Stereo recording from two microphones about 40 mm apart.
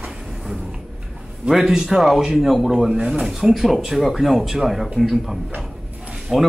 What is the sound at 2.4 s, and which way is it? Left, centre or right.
A man's voice, centre.